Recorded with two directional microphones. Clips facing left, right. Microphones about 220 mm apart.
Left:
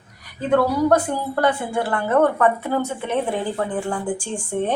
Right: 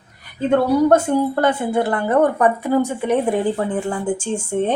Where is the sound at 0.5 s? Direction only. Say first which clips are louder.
Right 3 dB; 25° right (ahead or behind).